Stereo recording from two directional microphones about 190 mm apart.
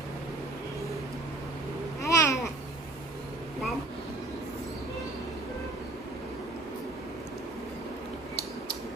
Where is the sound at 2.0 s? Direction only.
15° left (ahead or behind).